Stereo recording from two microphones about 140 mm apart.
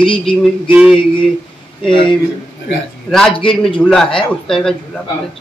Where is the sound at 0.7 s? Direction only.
5° right (ahead or behind).